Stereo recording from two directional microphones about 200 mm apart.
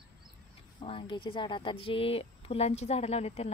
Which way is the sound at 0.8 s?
25° left (ahead or behind).